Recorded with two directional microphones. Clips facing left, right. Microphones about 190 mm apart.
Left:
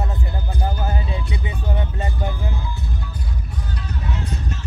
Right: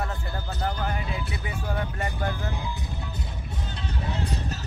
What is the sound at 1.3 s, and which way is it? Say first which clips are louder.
Music: left 3 dB; 20° left (ahead or behind).